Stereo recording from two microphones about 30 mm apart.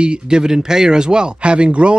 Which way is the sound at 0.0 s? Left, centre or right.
Right.